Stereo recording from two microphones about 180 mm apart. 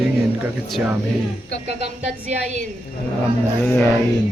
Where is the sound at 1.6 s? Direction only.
35° right (ahead or behind).